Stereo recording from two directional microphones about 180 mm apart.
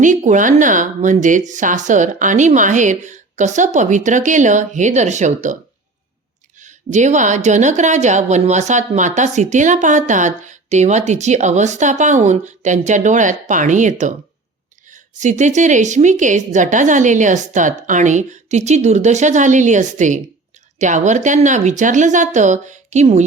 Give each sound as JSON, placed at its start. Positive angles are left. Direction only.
{"t": 0.0, "sound": "a woman's voice", "side_deg": -45}
{"t": 6.6, "sound": "a woman's voice", "side_deg": -40}